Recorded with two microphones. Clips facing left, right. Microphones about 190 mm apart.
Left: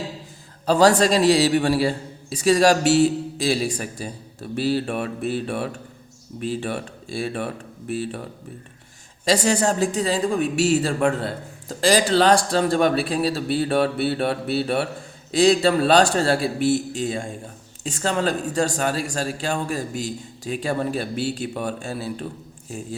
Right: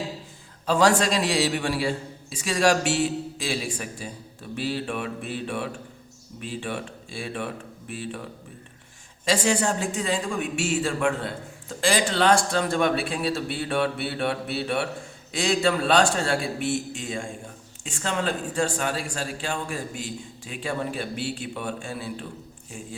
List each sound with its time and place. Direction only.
0.6 s speech: 35° left (ahead or behind)
9.2 s speech: 40° left (ahead or behind)